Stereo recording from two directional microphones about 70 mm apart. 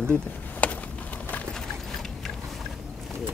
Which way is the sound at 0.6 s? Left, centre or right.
Centre.